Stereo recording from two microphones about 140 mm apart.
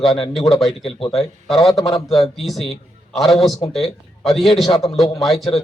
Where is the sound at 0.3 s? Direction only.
Centre (ahead or behind).